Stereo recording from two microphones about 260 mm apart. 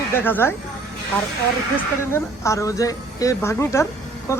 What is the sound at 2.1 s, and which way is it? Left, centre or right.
Speech, centre.